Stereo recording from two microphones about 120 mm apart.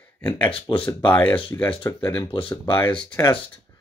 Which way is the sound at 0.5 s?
50° left (ahead or behind).